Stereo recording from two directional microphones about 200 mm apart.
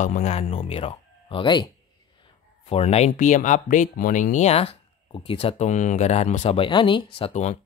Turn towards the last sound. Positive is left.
turn(degrees=30)  # may be behind; listen again after turning